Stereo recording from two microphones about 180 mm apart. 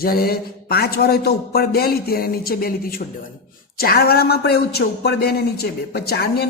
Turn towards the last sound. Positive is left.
turn(degrees=60)  # may be behind; listen again after turning